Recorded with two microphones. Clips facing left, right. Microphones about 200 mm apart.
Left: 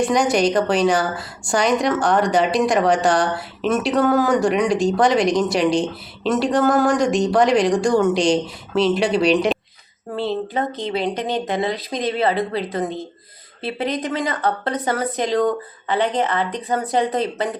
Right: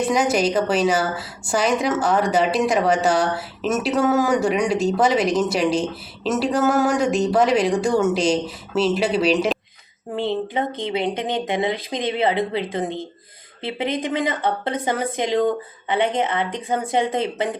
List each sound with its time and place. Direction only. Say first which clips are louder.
0.0 s a woman's voice: left 2 dB; 5° right (ahead or behind)
10.2 s speech: even; 20° right (ahead or behind)